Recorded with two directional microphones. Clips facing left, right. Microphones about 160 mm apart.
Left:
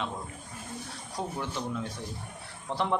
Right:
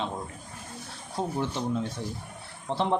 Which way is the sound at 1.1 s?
30° right (ahead or behind).